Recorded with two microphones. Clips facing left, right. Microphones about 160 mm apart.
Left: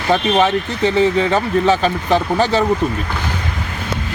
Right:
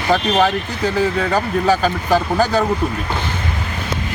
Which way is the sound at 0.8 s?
25° left (ahead or behind).